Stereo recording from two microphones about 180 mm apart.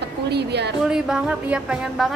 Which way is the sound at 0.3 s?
70° right (ahead or behind).